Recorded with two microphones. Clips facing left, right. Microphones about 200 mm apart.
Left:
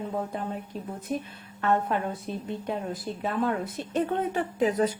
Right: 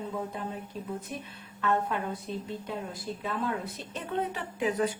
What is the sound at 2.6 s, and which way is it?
A woman's voice, 55° left (ahead or behind).